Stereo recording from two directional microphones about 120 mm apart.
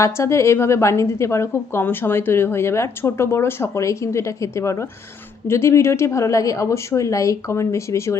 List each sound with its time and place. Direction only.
0.0 s a woman's voice: 25° left (ahead or behind)